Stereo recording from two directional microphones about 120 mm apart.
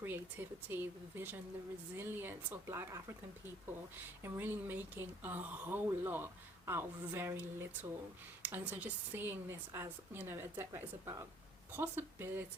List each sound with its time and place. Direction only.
0.0 s a woman's voice: 15° right (ahead or behind)
4.2 s a woman's voice: 15° right (ahead or behind)